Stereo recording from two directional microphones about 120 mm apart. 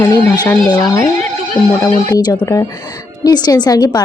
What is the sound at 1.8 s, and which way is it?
Speech, 30° left (ahead or behind).